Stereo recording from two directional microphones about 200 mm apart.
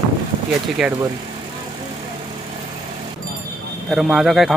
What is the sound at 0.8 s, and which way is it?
Speech, centre (ahead or behind).